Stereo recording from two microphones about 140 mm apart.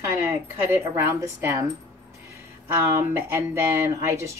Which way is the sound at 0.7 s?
20° right (ahead or behind).